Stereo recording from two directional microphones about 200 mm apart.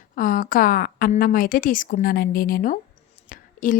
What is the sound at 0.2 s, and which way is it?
A woman's voice, 45° left (ahead or behind).